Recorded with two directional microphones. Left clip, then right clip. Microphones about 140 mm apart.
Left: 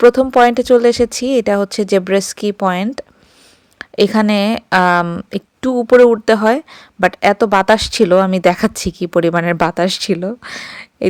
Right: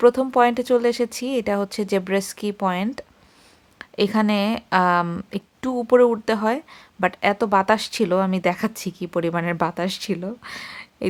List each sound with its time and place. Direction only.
0.0 s a woman's voice: 35° left (ahead or behind)